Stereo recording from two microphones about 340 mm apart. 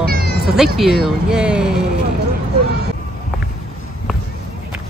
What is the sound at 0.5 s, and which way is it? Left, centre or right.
Speech, centre.